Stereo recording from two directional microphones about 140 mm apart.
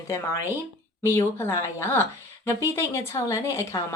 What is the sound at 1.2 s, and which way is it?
Speech, 20° left (ahead or behind).